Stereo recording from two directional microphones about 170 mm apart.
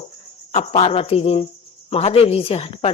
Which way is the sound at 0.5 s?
35° left (ahead or behind).